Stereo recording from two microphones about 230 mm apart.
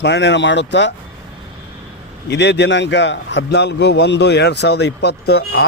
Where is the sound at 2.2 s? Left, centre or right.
Left.